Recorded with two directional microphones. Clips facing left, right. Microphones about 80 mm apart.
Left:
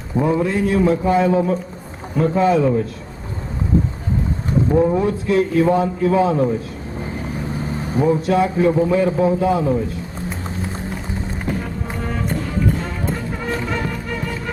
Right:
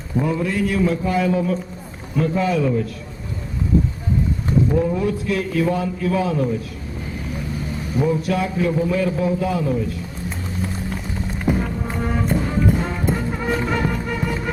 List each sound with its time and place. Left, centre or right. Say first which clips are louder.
0.3 s a man's voice: left 4 dB; left
4.7 s a man's voice: left 4 dB; left
7.6 s vehicle: left 3 dB; left
8.0 s a man's voice: left 5 dB; left
11.5 s music: right 5 dB; centre